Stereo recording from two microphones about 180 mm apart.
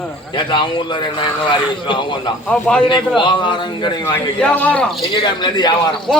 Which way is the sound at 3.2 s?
25° left (ahead or behind).